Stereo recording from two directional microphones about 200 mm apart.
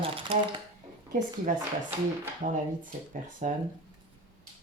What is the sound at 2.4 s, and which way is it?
Speech, 40° right (ahead or behind).